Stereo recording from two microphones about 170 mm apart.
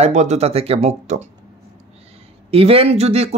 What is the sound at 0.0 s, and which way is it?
Speech, 40° right (ahead or behind).